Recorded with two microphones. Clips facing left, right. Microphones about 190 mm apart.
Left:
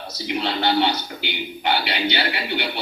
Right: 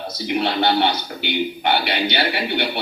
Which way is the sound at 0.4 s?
60° right (ahead or behind).